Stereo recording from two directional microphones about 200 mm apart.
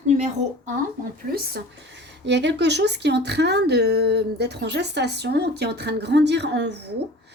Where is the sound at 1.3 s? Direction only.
55° right (ahead or behind).